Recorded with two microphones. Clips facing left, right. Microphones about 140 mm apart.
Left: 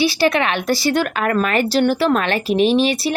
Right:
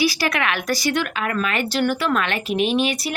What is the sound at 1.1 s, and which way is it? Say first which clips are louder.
Speech: left 6 dB; 50° left (ahead or behind).